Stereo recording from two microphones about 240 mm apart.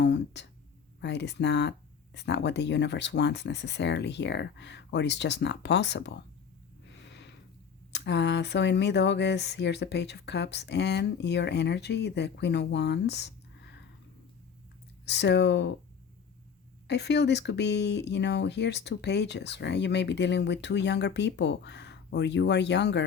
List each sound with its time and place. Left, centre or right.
0.0 s speech: left
6.8 s snort: left
7.9 s speech: left
15.0 s speech: left
16.8 s speech: left